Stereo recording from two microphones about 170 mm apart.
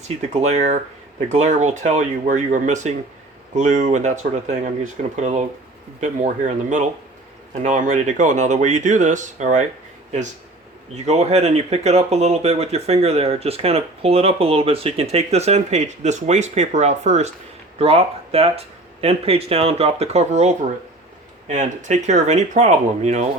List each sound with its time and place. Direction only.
0.0 s speech: 40° right (ahead or behind)
10.9 s speech: 40° right (ahead or behind)